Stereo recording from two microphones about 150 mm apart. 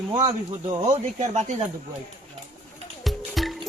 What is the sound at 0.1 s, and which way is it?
Speech, 30° right (ahead or behind).